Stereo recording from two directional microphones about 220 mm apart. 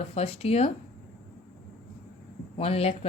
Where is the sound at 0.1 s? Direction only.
25° left (ahead or behind).